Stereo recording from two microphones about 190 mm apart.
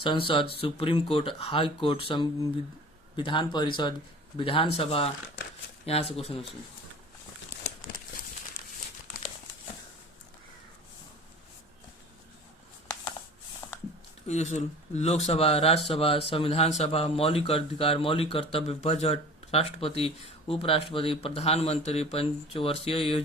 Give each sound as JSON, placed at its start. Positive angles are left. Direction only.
{"t": 0.0, "sound": "speech", "side_deg": 25}
{"t": 13.6, "sound": "a sound", "side_deg": 10}
{"t": 14.3, "sound": "speech", "side_deg": 35}